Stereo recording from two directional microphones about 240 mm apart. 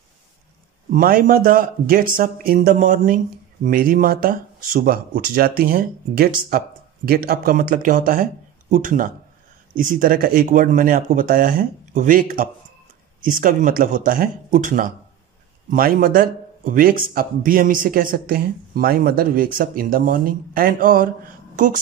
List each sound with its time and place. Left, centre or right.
0.8 s speech: right